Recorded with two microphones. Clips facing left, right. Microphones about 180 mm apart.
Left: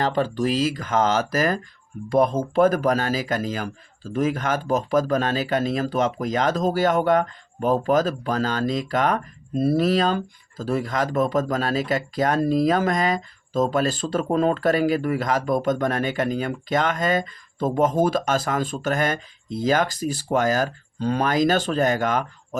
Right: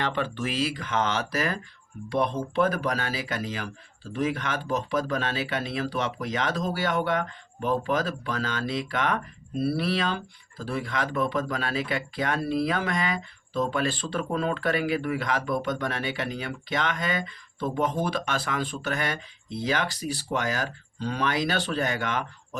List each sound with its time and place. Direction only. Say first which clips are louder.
0.0 s speech: left 7 dB; 40° left (ahead or behind)